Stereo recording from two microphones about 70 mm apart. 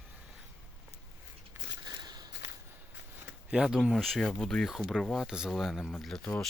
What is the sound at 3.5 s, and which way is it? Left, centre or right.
Speech, centre.